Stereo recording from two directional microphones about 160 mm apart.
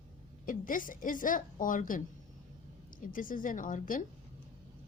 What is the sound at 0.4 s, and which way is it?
A woman's voice, 60° left (ahead or behind).